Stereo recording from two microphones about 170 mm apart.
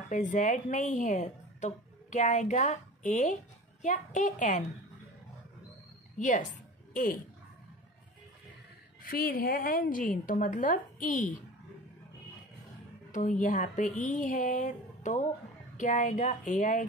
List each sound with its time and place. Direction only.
0.1 s a woman's voice: 45° left (ahead or behind)
6.1 s a woman's voice: 50° left (ahead or behind)
9.0 s a woman's voice: 60° left (ahead or behind)
13.1 s a woman's voice: 50° left (ahead or behind)